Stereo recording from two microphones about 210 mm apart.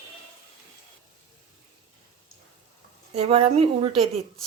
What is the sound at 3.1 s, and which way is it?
Speech, 30° right (ahead or behind).